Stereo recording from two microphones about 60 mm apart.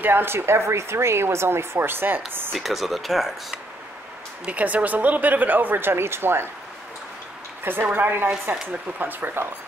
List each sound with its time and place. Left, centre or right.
0.0 s speech: right
2.5 s speech: centre
4.5 s a woman's voice: right
7.6 s a woman's voice: right